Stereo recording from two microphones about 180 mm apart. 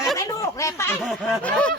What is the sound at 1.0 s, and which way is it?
Snicker, 5° left (ahead or behind).